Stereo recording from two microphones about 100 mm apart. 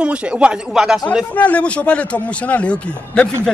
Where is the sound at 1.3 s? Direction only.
15° left (ahead or behind).